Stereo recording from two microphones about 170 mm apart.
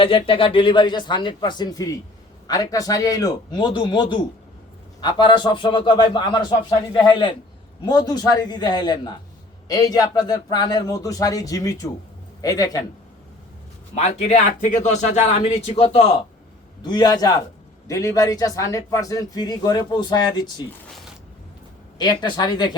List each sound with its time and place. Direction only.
0.0 s a man's voice: 30° left (ahead or behind)
13.9 s speech: 40° left (ahead or behind)
16.8 s a man's voice: 25° left (ahead or behind)
21.9 s a man's voice: 25° left (ahead or behind)